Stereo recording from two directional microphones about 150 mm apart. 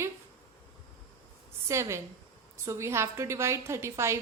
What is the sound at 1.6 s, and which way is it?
A woman's voice, 20° right (ahead or behind).